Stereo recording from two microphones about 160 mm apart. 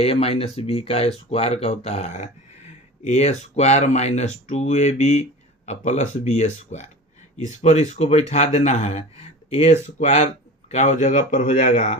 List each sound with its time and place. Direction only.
0.0 s speech: 40° left (ahead or behind)